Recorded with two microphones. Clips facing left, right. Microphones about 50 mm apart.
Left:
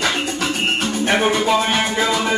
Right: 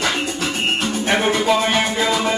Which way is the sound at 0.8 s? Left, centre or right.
Centre.